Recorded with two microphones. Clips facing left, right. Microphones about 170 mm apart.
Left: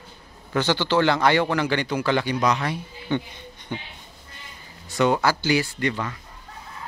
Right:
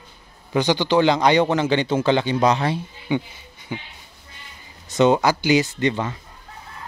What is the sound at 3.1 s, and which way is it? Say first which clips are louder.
Speech: right 2 dB; 10° right (ahead or behind).